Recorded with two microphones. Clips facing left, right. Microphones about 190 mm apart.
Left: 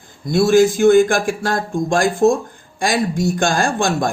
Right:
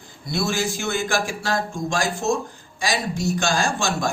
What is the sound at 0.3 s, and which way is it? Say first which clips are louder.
A man's voice: left 12 dB; 50° left (ahead or behind).